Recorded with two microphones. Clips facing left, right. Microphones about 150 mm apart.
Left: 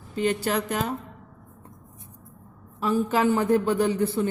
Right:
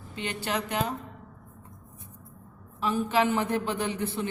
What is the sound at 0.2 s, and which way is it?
Speech, 40° left (ahead or behind).